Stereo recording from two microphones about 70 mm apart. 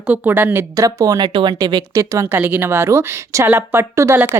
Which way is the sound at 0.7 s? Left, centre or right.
Right.